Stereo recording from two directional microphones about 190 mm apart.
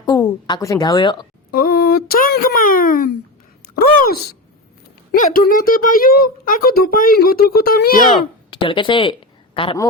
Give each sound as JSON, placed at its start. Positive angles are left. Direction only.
{"t": 0.0, "sound": "speech", "side_deg": 20}
{"t": 1.5, "sound": "speech", "side_deg": 50}
{"t": 8.4, "sound": "speech", "side_deg": 25}